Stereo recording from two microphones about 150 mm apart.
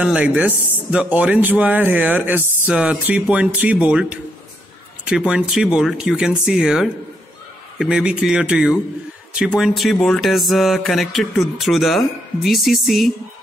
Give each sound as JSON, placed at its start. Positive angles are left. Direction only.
{"t": 0.0, "sound": "speech", "side_deg": -5}